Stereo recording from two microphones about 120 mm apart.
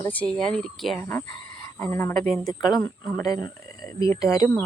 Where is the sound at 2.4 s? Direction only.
35° left (ahead or behind).